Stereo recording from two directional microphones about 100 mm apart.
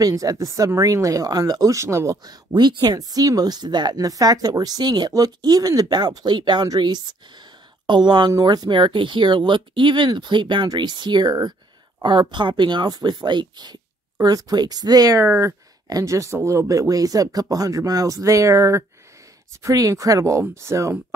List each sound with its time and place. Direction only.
0.0 s speech: 35° right (ahead or behind)
2.2 s speech: 45° right (ahead or behind)
15.2 s speech: 25° right (ahead or behind)